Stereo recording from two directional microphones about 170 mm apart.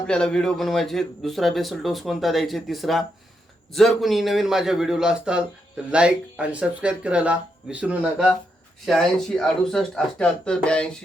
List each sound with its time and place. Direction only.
0.1 s a man's voice: 5° left (ahead or behind)